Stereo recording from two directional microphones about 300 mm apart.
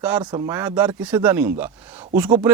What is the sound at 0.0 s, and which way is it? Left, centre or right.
Speech, centre.